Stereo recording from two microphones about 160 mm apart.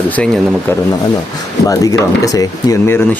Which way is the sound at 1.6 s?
20° left (ahead or behind).